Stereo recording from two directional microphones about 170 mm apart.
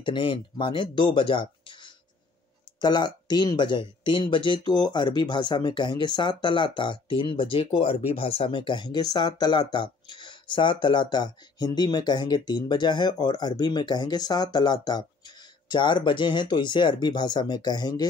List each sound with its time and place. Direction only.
0.0 s speech: 30° left (ahead or behind)